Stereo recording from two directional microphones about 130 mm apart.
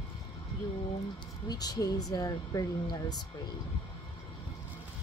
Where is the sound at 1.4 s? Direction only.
30° left (ahead or behind).